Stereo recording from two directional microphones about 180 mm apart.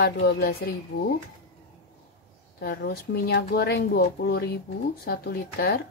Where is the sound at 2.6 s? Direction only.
60° left (ahead or behind).